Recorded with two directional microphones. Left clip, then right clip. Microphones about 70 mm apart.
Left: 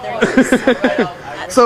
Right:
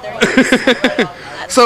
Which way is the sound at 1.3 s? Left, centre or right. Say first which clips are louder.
Right 1 dB; centre.